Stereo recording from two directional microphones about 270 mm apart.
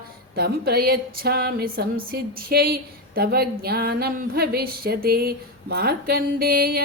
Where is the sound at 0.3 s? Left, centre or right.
Right.